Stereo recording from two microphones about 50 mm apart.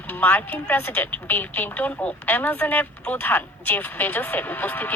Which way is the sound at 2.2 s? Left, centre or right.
Left.